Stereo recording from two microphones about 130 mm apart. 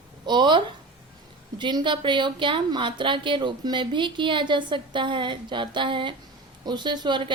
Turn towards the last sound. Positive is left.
turn(degrees=-35)  # may be behind; listen again after turning